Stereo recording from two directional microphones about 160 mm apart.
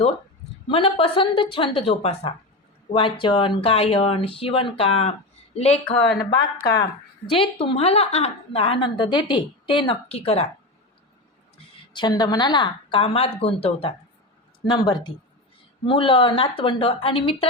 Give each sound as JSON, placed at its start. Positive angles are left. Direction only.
{"t": 0.7, "sound": "a woman's voice", "side_deg": 35}
{"t": 5.8, "sound": "speech", "side_deg": 5}
{"t": 6.6, "sound": "speech", "side_deg": 90}
{"t": 7.3, "sound": "a woman's voice", "side_deg": 35}
{"t": 11.5, "sound": "a woman's voice", "side_deg": 25}
{"t": 14.7, "sound": "a woman's voice", "side_deg": 30}